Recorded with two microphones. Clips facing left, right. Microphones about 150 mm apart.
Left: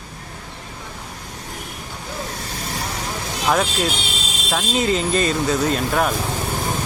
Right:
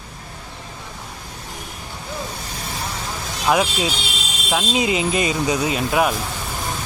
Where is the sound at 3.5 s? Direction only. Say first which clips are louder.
Right 1 dB; 5° right (ahead or behind).